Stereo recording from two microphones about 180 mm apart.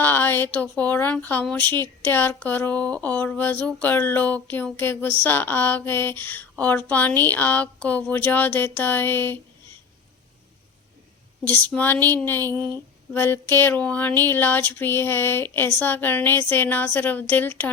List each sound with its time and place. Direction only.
0.0 s speech: 10° left (ahead or behind)
11.6 s speech: 10° left (ahead or behind)
12.4 s speech: 20° right (ahead or behind)
13.1 s speech: 10° left (ahead or behind)